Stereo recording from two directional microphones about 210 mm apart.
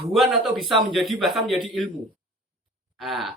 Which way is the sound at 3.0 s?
Centre (ahead or behind).